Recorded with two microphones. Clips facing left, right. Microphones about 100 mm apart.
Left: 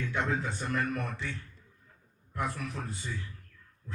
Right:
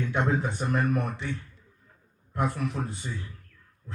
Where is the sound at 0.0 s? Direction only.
20° right (ahead or behind).